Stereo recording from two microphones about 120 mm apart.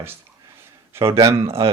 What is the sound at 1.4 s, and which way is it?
Speech, 55° right (ahead or behind).